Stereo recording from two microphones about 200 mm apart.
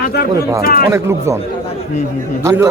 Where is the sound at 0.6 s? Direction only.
50° left (ahead or behind).